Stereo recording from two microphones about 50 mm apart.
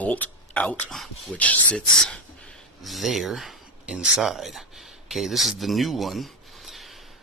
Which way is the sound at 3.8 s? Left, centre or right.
Centre.